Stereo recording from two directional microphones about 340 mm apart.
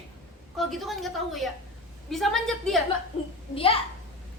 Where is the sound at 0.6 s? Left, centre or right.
Centre.